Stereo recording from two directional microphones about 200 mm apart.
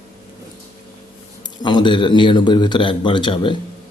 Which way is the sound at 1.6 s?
25° left (ahead or behind).